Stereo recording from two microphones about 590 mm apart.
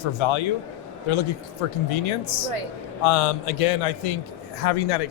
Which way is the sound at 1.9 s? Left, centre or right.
Left.